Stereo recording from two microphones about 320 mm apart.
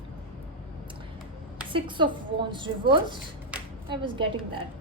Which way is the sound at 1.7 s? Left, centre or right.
Centre.